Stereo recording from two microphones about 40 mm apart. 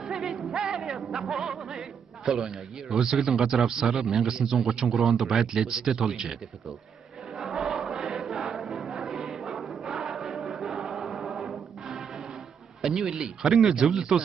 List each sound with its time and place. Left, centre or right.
0.0 s music: centre
1.3 s a man's voice: centre
7.3 s choir: centre
8.6 s music: centre
8.9 s music: centre
9.8 s choir: centre
10.1 s choir: centre
11.1 s music: centre
12.8 s a man's voice: centre